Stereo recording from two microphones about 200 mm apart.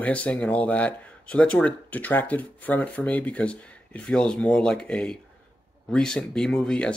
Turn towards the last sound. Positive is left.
turn(degrees=5)  # may be behind; listen again after turning